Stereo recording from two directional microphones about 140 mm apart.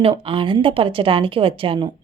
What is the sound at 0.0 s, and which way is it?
Speech, 40° right (ahead or behind).